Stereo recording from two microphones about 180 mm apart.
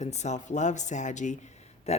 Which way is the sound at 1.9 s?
35° left (ahead or behind).